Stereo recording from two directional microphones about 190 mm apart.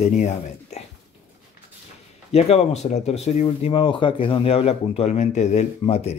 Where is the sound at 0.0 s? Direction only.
35° left (ahead or behind).